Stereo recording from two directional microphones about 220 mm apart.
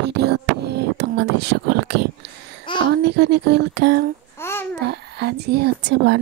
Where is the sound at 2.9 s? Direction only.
50° right (ahead or behind).